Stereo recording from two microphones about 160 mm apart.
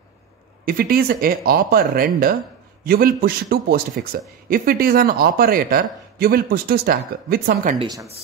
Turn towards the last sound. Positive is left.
turn(degrees=-70)  # may be behind; listen again after turning